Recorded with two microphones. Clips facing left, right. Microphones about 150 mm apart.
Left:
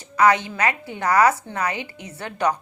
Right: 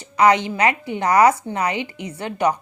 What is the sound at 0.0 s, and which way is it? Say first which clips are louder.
Speech: right 2 dB; 15° right (ahead or behind).